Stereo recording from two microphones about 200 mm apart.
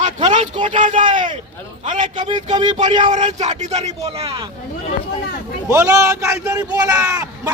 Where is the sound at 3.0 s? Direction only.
35° right (ahead or behind).